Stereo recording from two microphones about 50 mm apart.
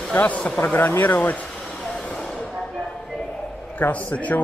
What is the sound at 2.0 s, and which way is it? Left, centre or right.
Vehicle, centre.